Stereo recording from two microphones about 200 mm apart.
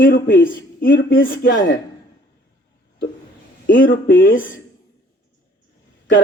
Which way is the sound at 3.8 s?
45° left (ahead or behind).